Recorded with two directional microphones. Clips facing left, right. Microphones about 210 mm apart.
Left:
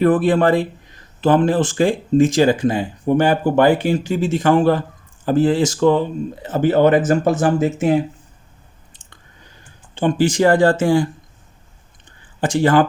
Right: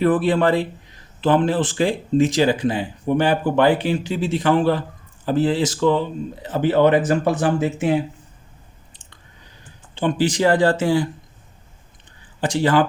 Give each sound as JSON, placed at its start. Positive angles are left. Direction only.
{"t": 0.0, "sound": "speech", "side_deg": 45}
{"t": 9.9, "sound": "speech", "side_deg": 45}
{"t": 12.4, "sound": "speech", "side_deg": 50}